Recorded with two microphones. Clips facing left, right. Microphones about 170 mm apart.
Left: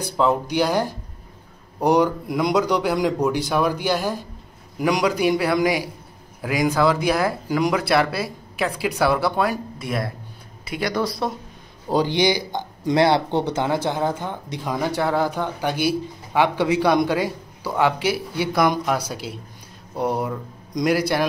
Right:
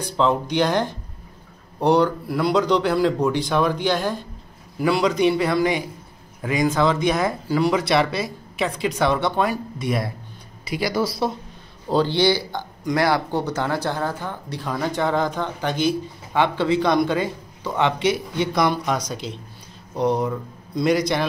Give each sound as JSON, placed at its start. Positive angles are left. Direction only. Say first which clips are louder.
{"t": 0.2, "sound": "a man's voice", "louder": "even", "side_deg": 5}
{"t": 7.7, "sound": "speech", "louder": "even", "side_deg": 0}
{"t": 11.9, "sound": "a man's voice", "louder": "right 1 dB", "side_deg": 15}